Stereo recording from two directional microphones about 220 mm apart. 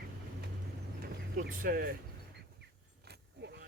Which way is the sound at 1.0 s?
40° right (ahead or behind).